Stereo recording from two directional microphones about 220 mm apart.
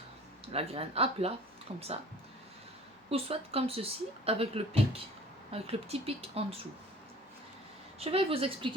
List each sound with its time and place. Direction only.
0.5 s speech: 25° right (ahead or behind)
3.1 s speech: 25° right (ahead or behind)
7.9 s speech: 25° right (ahead or behind)